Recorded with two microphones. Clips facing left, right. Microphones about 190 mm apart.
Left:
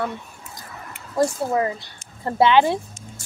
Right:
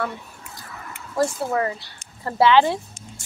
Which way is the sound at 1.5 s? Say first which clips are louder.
Left 1 dB; 20° left (ahead or behind).